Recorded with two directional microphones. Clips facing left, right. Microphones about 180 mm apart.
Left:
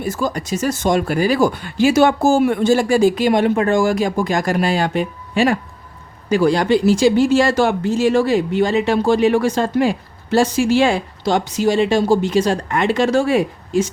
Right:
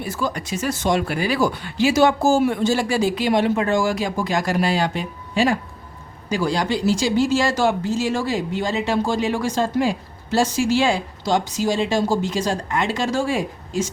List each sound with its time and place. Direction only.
0.0 s speech: 45° left (ahead or behind); by 13.9 s 60° left (ahead or behind)